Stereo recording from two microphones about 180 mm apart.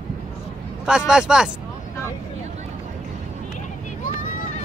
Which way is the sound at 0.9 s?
5° right (ahead or behind).